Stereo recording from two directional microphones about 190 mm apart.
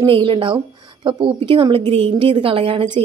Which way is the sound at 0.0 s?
25° right (ahead or behind).